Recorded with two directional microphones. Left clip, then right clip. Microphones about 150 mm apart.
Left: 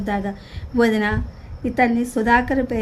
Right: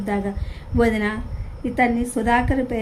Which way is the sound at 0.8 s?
45° left (ahead or behind).